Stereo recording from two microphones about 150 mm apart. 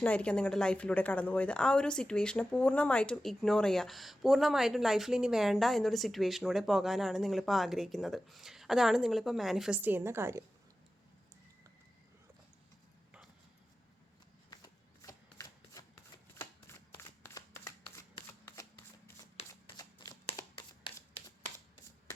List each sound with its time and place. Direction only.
0.0 s speech: 10° left (ahead or behind); by 10.4 s 15° right (ahead or behind)
14.5 s shuffling cards: 25° left (ahead or behind)
19.7 s shuffling cards: 25° left (ahead or behind)
20.3 s a sound: 35° left (ahead or behind)